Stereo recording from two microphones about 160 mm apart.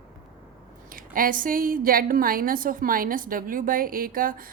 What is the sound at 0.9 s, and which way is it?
A woman's voice, 60° right (ahead or behind).